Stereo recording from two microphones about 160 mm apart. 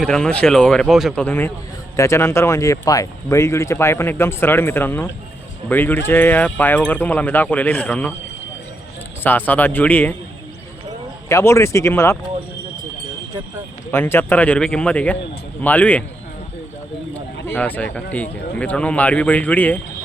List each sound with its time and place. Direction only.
0.0 s speech: 5° left (ahead or behind)
1.2 s speech: 15° left (ahead or behind)
9.2 s speech: 10° left (ahead or behind)
11.3 s speech: 20° left (ahead or behind)
13.9 s speech: 15° left (ahead or behind)
17.4 s a man's voice: 10° left (ahead or behind)